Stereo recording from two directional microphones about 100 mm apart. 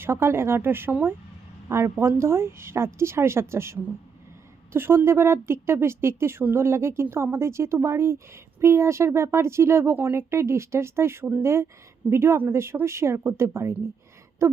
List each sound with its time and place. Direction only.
0.0 s speech: 25° right (ahead or behind)